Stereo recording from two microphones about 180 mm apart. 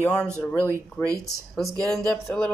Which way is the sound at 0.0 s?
5° left (ahead or behind).